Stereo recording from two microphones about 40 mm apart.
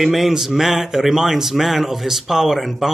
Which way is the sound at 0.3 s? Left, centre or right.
Centre.